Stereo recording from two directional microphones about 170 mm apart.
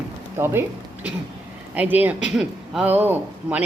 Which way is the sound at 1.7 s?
10° right (ahead or behind).